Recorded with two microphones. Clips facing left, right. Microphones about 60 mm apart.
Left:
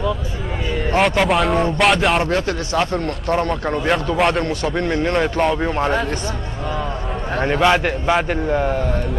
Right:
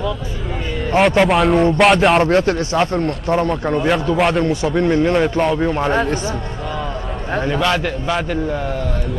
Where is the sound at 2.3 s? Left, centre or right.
Right.